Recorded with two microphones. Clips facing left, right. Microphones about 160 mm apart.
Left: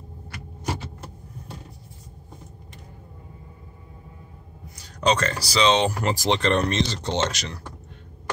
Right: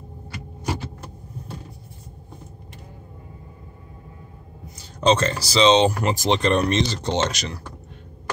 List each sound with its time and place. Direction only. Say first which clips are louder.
4.7 s speech: right 3 dB; 25° right (ahead or behind)